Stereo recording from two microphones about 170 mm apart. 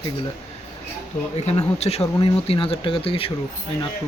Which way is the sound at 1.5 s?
40° left (ahead or behind).